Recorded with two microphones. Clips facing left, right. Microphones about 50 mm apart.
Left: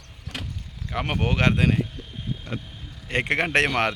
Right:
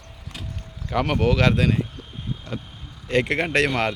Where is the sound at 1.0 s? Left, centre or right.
Centre.